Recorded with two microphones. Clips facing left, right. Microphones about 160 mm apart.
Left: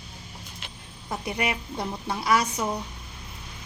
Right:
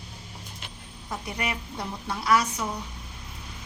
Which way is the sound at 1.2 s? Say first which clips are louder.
Left 4 dB; 15° left (ahead or behind).